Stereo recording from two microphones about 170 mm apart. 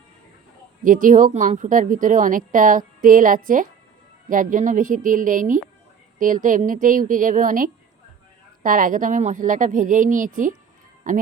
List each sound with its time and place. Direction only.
0.9 s a woman's voice: 50° right (ahead or behind)